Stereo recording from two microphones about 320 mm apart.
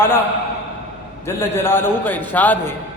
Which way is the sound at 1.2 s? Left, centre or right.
Centre.